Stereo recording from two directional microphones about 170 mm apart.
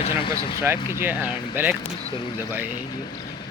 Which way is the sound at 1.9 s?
30° left (ahead or behind).